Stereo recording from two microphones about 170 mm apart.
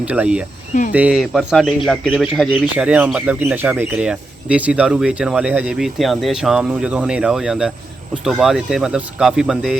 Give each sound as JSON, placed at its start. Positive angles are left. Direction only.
{"t": 0.0, "sound": "speech", "side_deg": -10}
{"t": 0.7, "sound": "speech", "side_deg": 50}
{"t": 0.9, "sound": "speech", "side_deg": -5}